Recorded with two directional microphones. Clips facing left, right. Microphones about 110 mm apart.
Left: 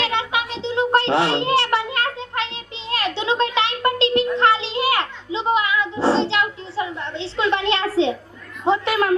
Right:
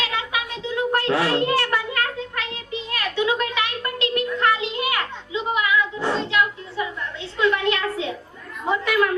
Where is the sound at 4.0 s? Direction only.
25° left (ahead or behind).